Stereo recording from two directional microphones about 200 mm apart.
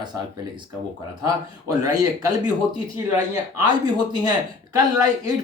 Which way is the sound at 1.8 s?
20° right (ahead or behind).